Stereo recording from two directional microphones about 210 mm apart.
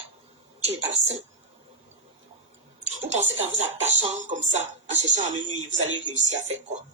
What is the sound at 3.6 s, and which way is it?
Speech, 35° right (ahead or behind).